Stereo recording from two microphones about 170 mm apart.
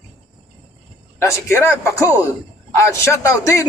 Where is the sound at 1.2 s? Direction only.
15° left (ahead or behind).